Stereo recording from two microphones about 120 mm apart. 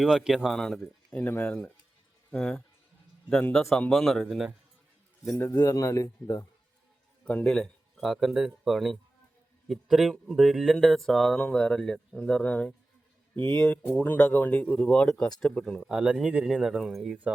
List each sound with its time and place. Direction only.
0.0 s speech: 5° right (ahead or behind)
5.5 s speech: 30° left (ahead or behind)
7.3 s speech: 10° left (ahead or behind)
15.9 s speech: 5° right (ahead or behind)